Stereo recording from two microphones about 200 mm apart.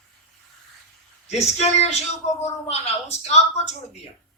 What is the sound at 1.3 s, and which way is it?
A man's voice, 35° left (ahead or behind).